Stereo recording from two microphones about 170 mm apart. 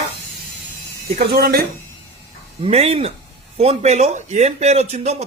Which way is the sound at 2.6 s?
35° right (ahead or behind).